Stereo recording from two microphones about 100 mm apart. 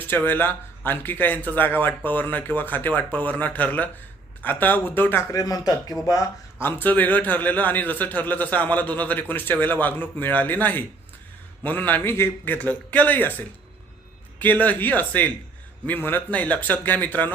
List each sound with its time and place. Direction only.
0.0 s a man's voice: 20° left (ahead or behind)
5.4 s speech: 40° left (ahead or behind)
6.6 s a man's voice: 20° left (ahead or behind)